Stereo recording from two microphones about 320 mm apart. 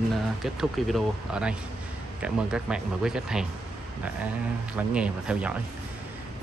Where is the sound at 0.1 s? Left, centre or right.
Centre.